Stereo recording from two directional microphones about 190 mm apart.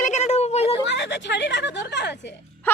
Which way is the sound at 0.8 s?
65° left (ahead or behind).